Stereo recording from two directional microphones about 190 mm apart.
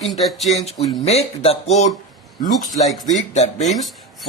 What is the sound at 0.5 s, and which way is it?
Speech, 35° left (ahead or behind).